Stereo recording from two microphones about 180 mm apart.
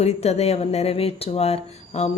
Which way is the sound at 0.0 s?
35° left (ahead or behind).